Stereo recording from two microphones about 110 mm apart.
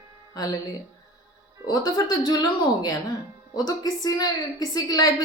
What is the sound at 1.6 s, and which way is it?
Speech, 35° left (ahead or behind).